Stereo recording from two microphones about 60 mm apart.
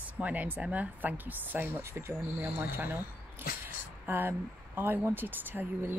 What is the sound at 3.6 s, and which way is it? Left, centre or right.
Speech, right.